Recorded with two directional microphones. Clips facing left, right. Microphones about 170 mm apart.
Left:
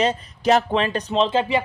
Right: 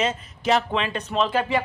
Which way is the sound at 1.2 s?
25° left (ahead or behind).